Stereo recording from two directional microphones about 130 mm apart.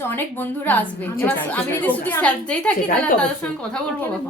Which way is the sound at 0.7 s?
10° left (ahead or behind).